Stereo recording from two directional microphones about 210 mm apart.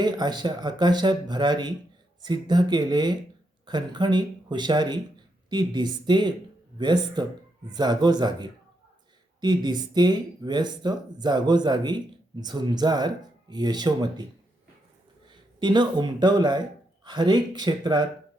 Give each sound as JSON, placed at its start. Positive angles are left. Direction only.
{"t": 0.0, "sound": "speech", "side_deg": -20}
{"t": 15.3, "sound": "speech", "side_deg": -20}